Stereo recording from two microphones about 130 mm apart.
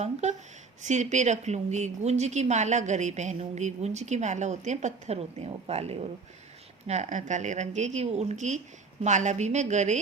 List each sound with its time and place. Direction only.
0.0 s a woman's voice: 60° right (ahead or behind)
6.8 s a woman's voice: 60° right (ahead or behind)